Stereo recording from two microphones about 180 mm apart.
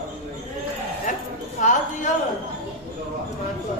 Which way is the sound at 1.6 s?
45° left (ahead or behind).